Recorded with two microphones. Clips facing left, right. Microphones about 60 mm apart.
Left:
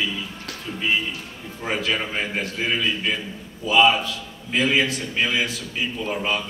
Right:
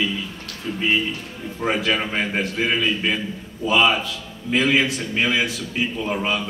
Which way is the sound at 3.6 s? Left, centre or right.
Right.